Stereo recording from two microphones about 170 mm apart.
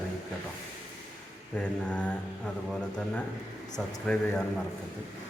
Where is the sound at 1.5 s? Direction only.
5° left (ahead or behind).